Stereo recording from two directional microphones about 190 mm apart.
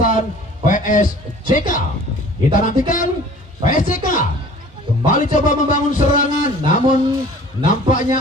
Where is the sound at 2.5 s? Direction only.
45° left (ahead or behind).